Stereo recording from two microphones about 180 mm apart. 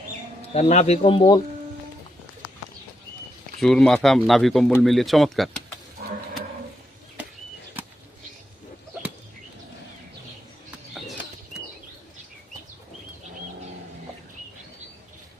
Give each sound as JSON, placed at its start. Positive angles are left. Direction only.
{"t": 0.5, "sound": "speech", "side_deg": 40}
{"t": 3.6, "sound": "speech", "side_deg": 0}